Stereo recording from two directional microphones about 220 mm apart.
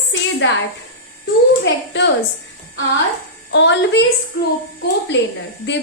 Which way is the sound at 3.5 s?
55° left (ahead or behind).